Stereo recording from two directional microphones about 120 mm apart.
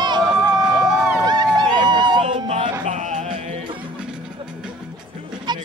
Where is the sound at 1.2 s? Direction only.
35° right (ahead or behind).